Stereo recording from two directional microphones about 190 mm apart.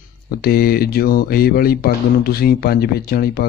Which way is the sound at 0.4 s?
55° left (ahead or behind).